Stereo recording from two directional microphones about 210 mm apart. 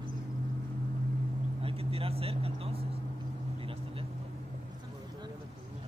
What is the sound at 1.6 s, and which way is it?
Vehicle, 25° right (ahead or behind).